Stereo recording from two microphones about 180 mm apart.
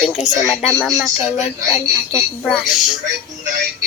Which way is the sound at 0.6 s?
5° right (ahead or behind).